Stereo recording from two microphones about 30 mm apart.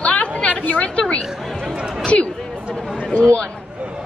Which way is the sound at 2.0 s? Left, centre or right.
Left.